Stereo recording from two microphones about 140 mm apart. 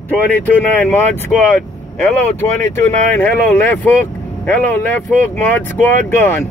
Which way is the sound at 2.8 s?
15° left (ahead or behind).